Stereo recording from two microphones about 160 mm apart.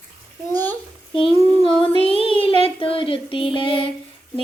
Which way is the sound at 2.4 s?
35° left (ahead or behind).